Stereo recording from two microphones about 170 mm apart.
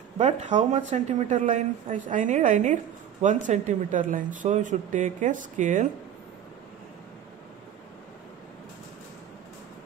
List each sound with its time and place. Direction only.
0.2 s speech: 45° right (ahead or behind)